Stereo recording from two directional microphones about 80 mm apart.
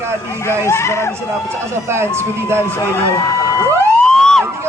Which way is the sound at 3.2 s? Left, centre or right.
Left.